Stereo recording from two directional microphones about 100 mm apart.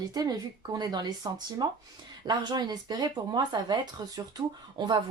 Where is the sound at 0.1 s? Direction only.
40° right (ahead or behind).